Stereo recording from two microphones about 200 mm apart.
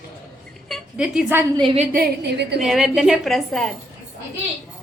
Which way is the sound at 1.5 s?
30° right (ahead or behind).